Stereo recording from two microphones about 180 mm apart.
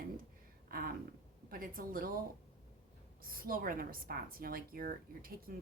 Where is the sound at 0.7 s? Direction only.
55° right (ahead or behind).